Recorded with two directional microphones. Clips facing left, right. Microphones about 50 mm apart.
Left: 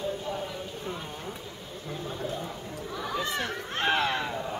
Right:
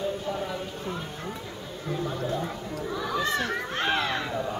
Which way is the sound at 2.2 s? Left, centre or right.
Right.